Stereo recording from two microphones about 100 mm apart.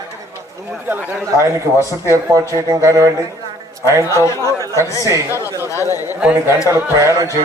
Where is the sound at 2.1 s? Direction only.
30° right (ahead or behind).